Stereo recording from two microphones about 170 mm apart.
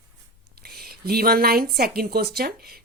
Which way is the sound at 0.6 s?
65° right (ahead or behind).